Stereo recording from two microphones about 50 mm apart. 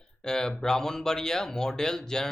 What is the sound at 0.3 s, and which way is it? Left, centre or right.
Speech, centre.